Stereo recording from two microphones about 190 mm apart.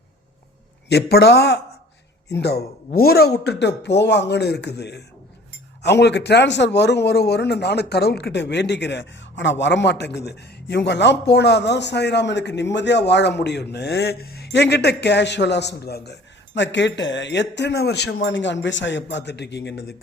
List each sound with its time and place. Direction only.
0.9 s speech: 60° left (ahead or behind)